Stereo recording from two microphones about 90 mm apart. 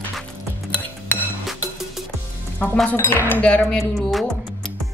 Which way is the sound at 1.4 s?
5° right (ahead or behind).